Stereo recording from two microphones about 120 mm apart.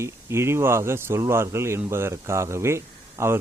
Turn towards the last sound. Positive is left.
turn(degrees=-20)  # may be behind; listen again after turning